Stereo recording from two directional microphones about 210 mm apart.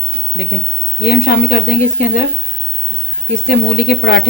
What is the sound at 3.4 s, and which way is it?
Speech, 45° left (ahead or behind).